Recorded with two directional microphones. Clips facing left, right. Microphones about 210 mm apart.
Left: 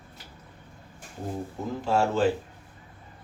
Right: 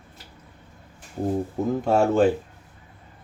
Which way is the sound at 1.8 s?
55° right (ahead or behind).